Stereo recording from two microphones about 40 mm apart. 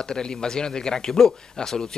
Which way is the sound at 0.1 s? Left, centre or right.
Centre.